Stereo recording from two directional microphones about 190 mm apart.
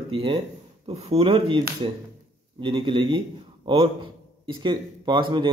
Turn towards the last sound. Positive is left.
turn(degrees=-25)  # may be behind; listen again after turning